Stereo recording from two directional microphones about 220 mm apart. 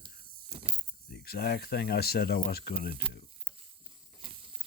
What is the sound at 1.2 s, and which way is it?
Speech, 45° left (ahead or behind).